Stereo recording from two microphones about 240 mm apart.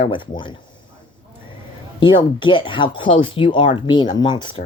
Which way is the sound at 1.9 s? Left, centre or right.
Centre.